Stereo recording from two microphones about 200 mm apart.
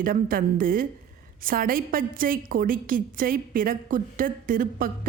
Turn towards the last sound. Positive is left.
turn(degrees=-45)  # may be behind; listen again after turning